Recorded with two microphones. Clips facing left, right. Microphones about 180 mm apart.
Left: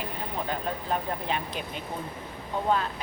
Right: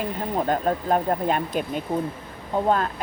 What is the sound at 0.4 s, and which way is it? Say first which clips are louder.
Speech: right 9 dB; 45° right (ahead or behind).